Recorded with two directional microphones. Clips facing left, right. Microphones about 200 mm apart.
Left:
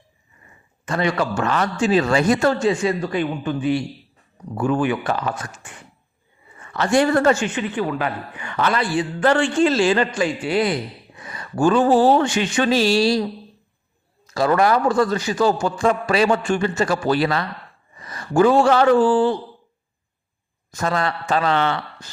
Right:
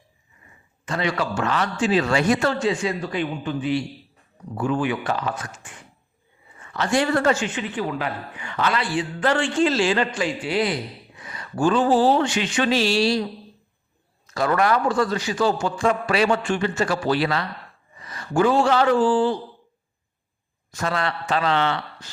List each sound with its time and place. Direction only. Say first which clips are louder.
0.9 s a man's voice: left 3 dB; 50° left (ahead or behind)
6.7 s a man's voice: left 4 dB; 45° left (ahead or behind)
14.3 s a man's voice: left 3 dB; 30° left (ahead or behind); by 19.3 s 55° left (ahead or behind)
20.7 s a man's voice: left 3 dB; 40° left (ahead or behind)